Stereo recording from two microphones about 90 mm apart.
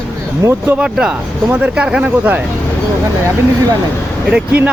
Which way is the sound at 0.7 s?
10° right (ahead or behind).